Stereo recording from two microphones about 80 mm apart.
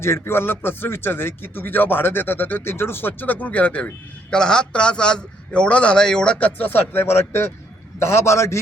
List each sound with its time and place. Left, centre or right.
0.0 s a man's voice: left